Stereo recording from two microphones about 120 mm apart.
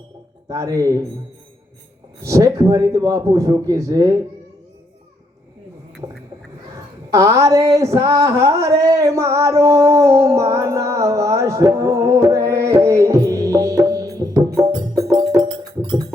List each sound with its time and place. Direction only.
0.4 s a man's voice: 30° right (ahead or behind)
2.2 s a man's voice: 25° right (ahead or behind)
6.7 s a sound: 25° right (ahead or behind)